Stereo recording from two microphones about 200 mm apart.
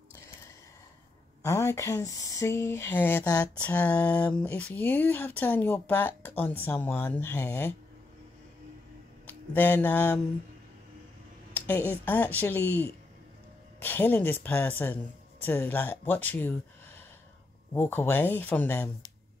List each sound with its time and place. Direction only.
1.4 s speech: 15° left (ahead or behind)
9.2 s a sound: 10° left (ahead or behind)
11.5 s speech: 10° left (ahead or behind)